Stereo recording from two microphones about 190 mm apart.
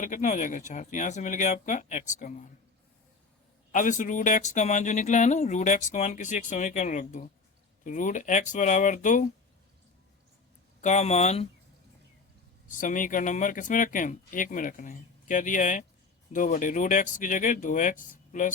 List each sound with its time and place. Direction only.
0.0 s speech: 40° left (ahead or behind)
3.7 s speech: 40° left (ahead or behind)
10.8 s speech: 40° left (ahead or behind)
12.7 s speech: 45° left (ahead or behind)